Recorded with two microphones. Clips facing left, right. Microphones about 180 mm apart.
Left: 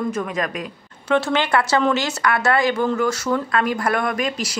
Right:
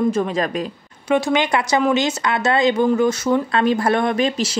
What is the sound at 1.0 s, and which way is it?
Speech, 15° right (ahead or behind).